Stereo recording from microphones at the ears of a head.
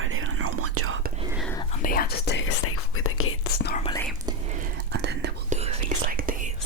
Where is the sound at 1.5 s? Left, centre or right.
Left.